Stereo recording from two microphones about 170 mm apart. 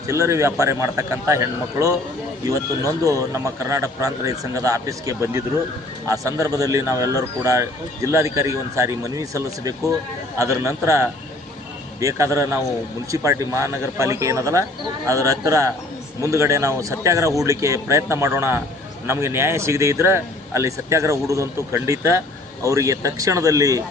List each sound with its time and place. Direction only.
0.1 s speech: 15° right (ahead or behind)